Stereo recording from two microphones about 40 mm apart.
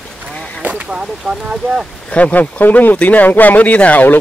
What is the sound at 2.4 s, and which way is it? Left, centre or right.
Speech, left.